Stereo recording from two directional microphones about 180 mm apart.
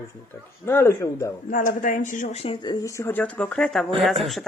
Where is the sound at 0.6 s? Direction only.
15° left (ahead or behind).